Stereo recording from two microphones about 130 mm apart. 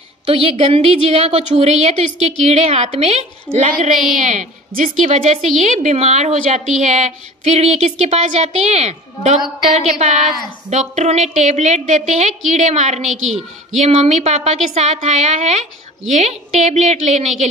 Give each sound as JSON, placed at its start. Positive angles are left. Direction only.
{"t": 0.3, "sound": "a woman's voice", "side_deg": -45}
{"t": 3.5, "sound": "a woman's voice", "side_deg": -65}